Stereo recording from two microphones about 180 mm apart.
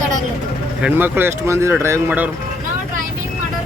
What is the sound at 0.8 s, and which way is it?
Speech, 10° right (ahead or behind).